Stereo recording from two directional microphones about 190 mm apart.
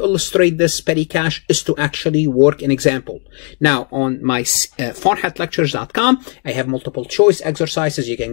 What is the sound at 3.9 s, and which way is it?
Speech, 35° left (ahead or behind).